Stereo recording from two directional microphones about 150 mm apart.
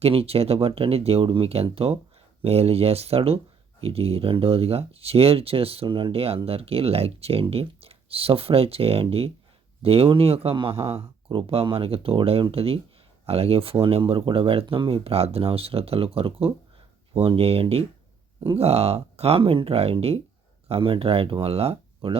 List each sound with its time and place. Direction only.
0.0 s speech: 40° right (ahead or behind)